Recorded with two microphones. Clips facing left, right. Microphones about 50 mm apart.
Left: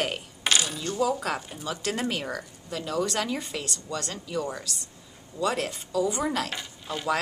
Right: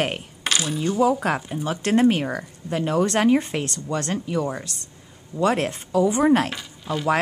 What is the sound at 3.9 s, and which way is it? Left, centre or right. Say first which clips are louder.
Speech: right 7 dB; right.